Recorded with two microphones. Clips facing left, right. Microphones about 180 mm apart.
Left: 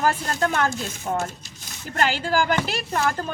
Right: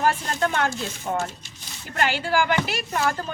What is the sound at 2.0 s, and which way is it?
A woman's voice, 40° left (ahead or behind).